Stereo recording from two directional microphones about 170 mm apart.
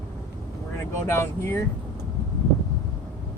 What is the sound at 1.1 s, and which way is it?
Speech, 15° left (ahead or behind).